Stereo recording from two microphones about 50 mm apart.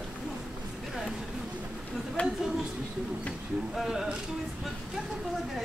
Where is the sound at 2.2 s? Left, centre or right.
Left.